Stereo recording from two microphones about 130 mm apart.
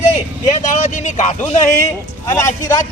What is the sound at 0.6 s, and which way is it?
Speech, 70° left (ahead or behind).